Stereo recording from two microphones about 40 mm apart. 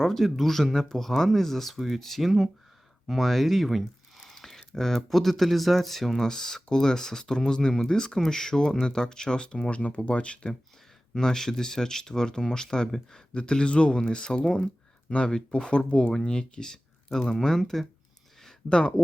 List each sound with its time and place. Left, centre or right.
0.0 s speech: centre
6.2 s speech: centre
11.1 s speech: centre
13.3 s speech: left
17.1 s speech: centre
18.7 s speech: left